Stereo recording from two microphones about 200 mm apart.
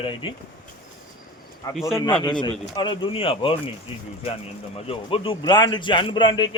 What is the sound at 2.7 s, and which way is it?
Speech, 20° left (ahead or behind).